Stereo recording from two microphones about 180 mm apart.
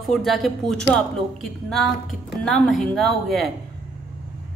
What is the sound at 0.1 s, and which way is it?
A woman's voice, centre (ahead or behind).